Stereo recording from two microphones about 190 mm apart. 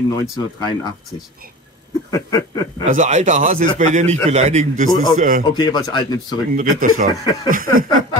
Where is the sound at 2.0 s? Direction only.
20° left (ahead or behind).